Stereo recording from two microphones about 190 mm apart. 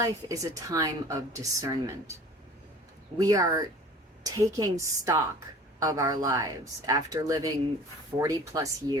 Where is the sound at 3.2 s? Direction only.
20° right (ahead or behind).